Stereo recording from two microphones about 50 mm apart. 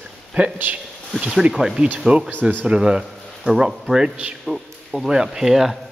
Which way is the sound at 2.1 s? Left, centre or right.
Right.